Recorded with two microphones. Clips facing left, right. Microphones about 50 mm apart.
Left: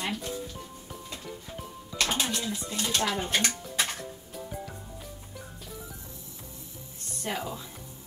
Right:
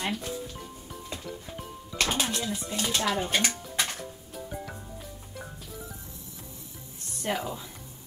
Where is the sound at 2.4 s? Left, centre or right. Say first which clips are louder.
Right 1 dB; right.